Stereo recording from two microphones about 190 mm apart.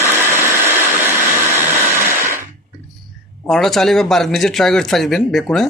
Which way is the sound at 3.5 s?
Centre (ahead or behind).